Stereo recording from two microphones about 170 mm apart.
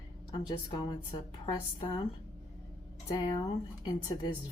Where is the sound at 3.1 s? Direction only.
25° left (ahead or behind).